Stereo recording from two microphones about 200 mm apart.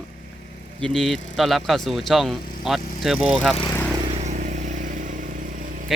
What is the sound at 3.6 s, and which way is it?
Vehicle, 15° left (ahead or behind).